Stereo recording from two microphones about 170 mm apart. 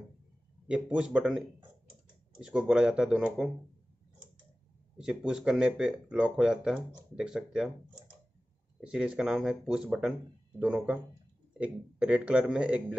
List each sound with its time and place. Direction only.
0.7 s speech: 5° right (ahead or behind)
4.9 s speech: 5° right (ahead or behind)
8.8 s a man's voice: 5° right (ahead or behind)